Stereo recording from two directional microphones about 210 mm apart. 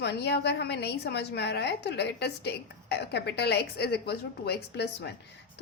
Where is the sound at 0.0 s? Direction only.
55° left (ahead or behind).